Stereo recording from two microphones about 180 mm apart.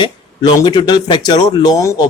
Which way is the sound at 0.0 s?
25° left (ahead or behind).